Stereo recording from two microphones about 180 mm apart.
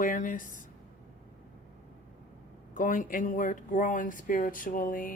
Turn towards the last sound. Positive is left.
turn(degrees=50)  # may be behind; listen again after turning